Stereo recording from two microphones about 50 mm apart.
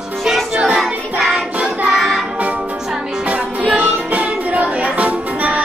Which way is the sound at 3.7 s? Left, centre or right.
Right.